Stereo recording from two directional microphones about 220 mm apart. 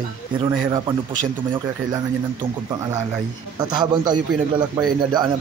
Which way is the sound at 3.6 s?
20° right (ahead or behind).